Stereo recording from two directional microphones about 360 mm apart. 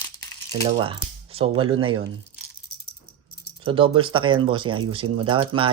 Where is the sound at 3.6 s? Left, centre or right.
Centre.